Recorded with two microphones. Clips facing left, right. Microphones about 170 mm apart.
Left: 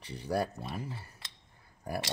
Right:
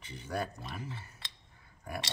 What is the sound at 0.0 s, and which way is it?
Speech, 35° left (ahead or behind).